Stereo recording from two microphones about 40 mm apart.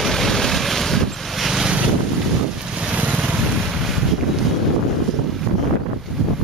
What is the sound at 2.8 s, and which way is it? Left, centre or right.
Vehicle, right.